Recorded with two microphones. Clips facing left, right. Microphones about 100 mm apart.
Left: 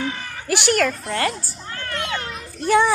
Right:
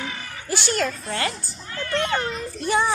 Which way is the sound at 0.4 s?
70° left (ahead or behind).